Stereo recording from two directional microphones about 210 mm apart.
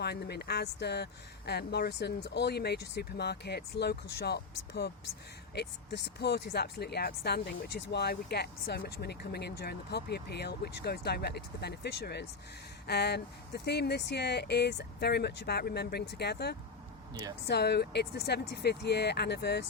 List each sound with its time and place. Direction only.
0.0 s speech: 50° left (ahead or behind)